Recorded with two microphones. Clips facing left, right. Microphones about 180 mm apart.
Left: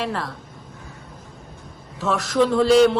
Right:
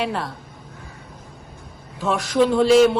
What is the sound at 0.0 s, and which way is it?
Speech, centre (ahead or behind).